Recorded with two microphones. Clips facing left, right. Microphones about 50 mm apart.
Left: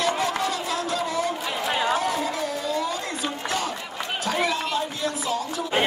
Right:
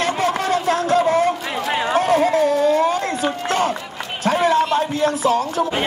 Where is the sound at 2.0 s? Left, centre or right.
Right.